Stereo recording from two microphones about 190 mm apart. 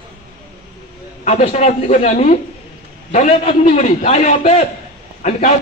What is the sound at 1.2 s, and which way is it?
A man's voice, 35° left (ahead or behind).